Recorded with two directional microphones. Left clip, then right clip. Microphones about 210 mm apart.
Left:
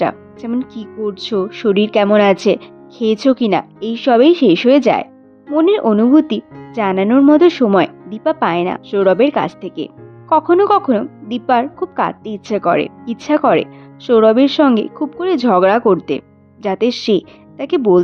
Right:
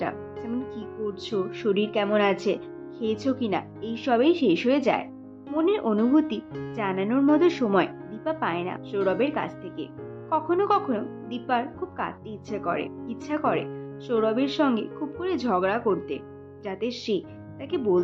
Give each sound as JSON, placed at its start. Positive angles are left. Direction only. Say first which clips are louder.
{"t": 0.0, "sound": "speech", "louder": "left 12 dB", "side_deg": 55}